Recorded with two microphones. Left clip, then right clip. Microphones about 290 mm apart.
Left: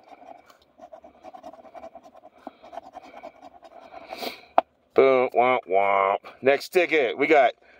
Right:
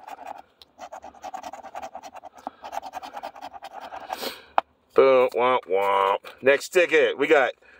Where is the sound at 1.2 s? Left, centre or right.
Right.